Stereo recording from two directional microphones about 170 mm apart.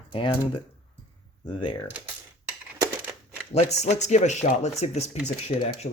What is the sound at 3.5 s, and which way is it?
Speech, 40° left (ahead or behind).